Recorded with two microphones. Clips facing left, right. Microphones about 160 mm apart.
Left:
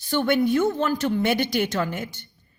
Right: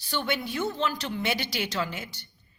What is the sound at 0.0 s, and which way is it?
Speech, 50° left (ahead or behind).